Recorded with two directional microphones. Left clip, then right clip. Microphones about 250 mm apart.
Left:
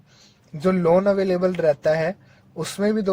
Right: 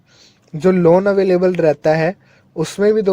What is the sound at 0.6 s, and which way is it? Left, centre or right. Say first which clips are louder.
Speech: right 6 dB; right.